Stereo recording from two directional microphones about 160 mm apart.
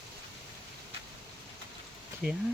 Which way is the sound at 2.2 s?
5° right (ahead or behind).